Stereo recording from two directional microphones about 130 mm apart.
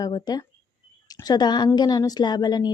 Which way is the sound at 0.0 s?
30° left (ahead or behind).